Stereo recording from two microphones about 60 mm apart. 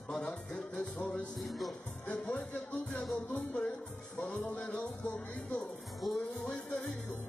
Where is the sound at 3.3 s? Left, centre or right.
Left; by 5.1 s centre.